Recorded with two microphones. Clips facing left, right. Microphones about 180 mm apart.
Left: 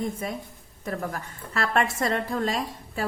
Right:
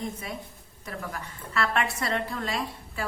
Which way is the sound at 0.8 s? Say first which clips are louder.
Left 5 dB; 45° left (ahead or behind).